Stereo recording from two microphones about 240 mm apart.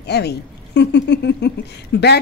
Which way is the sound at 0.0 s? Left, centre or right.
Left.